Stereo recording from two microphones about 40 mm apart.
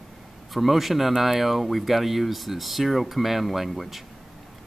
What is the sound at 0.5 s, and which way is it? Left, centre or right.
Speech, centre.